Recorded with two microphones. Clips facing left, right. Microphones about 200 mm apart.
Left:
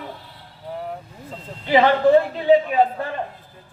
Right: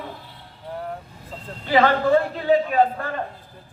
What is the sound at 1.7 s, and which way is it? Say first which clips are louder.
A man's voice: left 3 dB; 20° left (ahead or behind).